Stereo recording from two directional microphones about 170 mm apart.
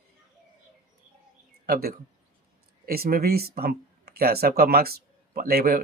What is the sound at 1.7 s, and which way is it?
Speech, 60° right (ahead or behind).